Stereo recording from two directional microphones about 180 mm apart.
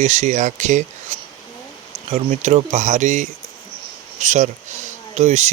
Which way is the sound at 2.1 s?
35° right (ahead or behind).